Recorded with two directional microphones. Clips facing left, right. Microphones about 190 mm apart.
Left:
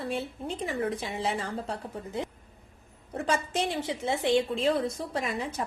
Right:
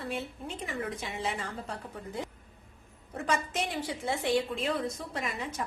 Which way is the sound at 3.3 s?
30° left (ahead or behind).